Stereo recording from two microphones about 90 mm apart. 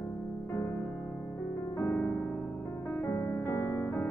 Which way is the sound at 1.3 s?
35° left (ahead or behind).